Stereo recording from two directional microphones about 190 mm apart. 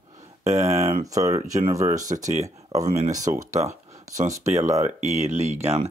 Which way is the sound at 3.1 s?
15° right (ahead or behind).